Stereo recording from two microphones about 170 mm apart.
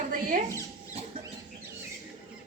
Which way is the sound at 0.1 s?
55° right (ahead or behind).